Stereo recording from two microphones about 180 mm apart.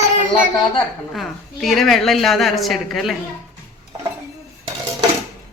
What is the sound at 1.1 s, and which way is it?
A woman's voice, centre (ahead or behind).